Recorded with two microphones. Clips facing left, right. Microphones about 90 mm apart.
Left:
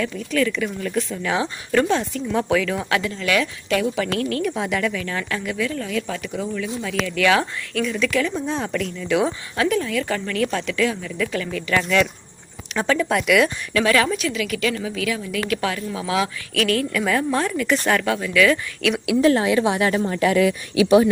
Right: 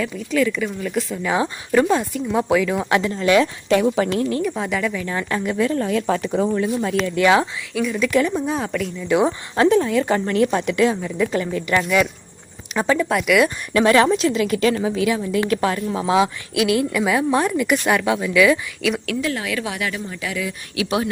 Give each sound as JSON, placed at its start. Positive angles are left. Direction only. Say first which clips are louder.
{"t": 0.3, "sound": "a woman's voice", "louder": "right 2 dB", "side_deg": -5}
{"t": 3.0, "sound": "a woman's voice", "louder": "right 5 dB", "side_deg": -30}
{"t": 4.4, "sound": "speech", "louder": "even", "side_deg": 0}
{"t": 4.9, "sound": "speech", "louder": "right 3 dB", "side_deg": -25}
{"t": 7.0, "sound": "a woman's voice", "louder": "right 2 dB", "side_deg": -20}
{"t": 7.7, "sound": "a woman's voice", "louder": "right 3 dB", "side_deg": -5}
{"t": 9.6, "sound": "a woman's voice", "louder": "right 5 dB", "side_deg": -30}
{"t": 11.8, "sound": "a woman's voice", "louder": "left 1 dB", "side_deg": -10}
{"t": 13.7, "sound": "a woman's voice", "louder": "right 4 dB", "side_deg": -30}
{"t": 16.6, "sound": "a woman's voice", "louder": "right 2 dB", "side_deg": -15}
{"t": 19.2, "sound": "a woman's voice", "louder": "left 7 dB", "side_deg": 35}
{"t": 20.0, "sound": "speech", "louder": "left 9 dB", "side_deg": 55}